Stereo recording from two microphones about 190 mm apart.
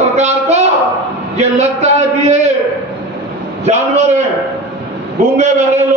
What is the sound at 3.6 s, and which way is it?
Speech, 35° right (ahead or behind).